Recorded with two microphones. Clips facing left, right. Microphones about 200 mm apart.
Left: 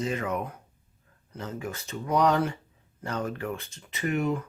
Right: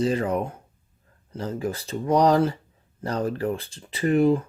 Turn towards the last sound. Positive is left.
turn(degrees=-30)  # may be behind; listen again after turning